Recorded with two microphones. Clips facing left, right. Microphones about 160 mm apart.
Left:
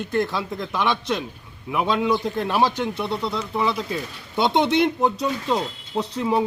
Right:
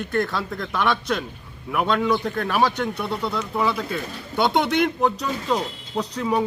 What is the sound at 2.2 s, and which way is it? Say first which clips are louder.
Speech: even; 25° left (ahead or behind).